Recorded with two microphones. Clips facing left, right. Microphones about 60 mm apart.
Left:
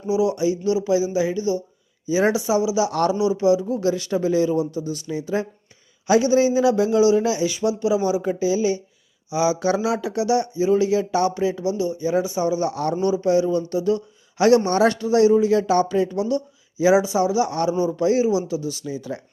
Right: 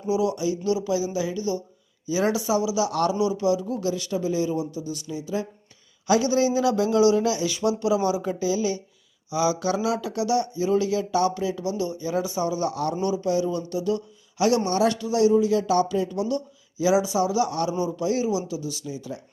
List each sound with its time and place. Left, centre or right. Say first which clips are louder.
0.1 s speech: left 4 dB; left
6.1 s speech: left 4 dB; left
11.8 s speech: left 6 dB; centre; by 18.9 s left
18.9 s speech: left 4 dB; left